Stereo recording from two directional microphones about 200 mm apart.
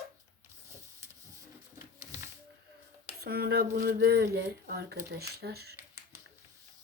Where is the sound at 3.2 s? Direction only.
50° right (ahead or behind).